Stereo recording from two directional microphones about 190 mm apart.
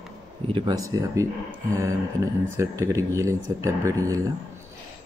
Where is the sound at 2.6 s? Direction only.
15° right (ahead or behind).